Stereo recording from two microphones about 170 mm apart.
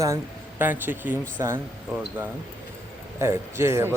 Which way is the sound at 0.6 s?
10° right (ahead or behind).